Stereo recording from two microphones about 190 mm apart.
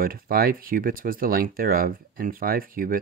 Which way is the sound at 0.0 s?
50° right (ahead or behind).